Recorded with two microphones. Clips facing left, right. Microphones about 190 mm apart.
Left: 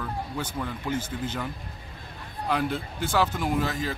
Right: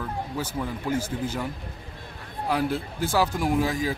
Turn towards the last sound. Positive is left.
turn(degrees=-10)  # may be behind; listen again after turning